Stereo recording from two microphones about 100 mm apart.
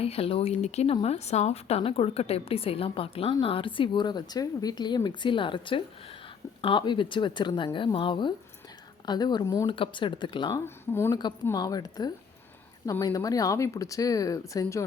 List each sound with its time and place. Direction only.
0.0 s a woman's voice: 85° left; by 8.3 s 55° left (ahead or behind)
9.0 s speech: 45° left (ahead or behind)
9.6 s speech: 60° left (ahead or behind)
10.5 s speech: 25° left (ahead or behind)
11.1 s speech: 45° left (ahead or behind)